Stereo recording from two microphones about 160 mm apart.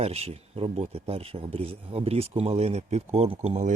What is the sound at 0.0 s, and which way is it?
Speech, 40° right (ahead or behind).